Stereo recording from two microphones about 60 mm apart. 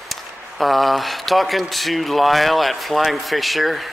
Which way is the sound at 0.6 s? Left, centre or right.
Centre.